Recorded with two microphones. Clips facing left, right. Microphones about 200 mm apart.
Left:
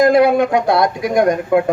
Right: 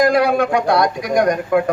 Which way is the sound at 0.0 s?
25° left (ahead or behind).